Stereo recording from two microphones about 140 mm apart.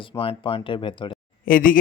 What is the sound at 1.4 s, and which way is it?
Speech, 80° left.